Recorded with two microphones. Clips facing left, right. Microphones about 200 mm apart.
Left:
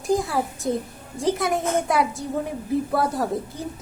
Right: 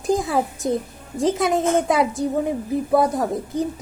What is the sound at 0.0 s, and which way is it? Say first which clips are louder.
A woman's voice: right 2 dB; 20° right (ahead or behind).